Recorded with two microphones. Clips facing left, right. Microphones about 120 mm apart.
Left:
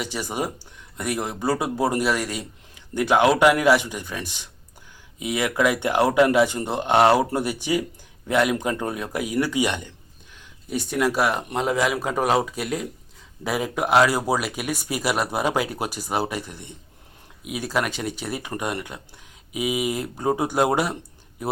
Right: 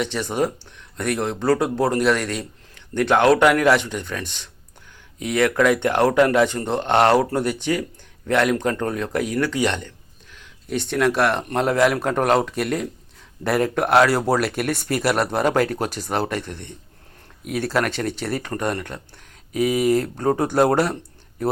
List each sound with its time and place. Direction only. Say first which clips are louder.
0.0 s speech: right 5 dB; 10° left (ahead or behind)